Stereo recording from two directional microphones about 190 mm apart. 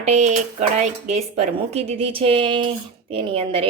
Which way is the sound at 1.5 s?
30° right (ahead or behind).